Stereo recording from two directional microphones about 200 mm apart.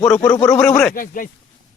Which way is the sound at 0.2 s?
20° left (ahead or behind).